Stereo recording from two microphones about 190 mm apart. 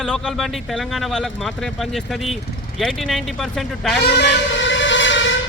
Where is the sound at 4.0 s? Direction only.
65° left (ahead or behind).